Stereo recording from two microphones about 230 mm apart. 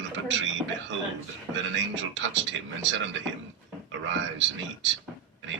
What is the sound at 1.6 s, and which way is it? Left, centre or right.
A man's voice, right.